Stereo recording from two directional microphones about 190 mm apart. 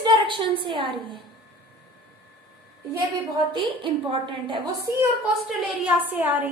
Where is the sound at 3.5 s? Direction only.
25° right (ahead or behind).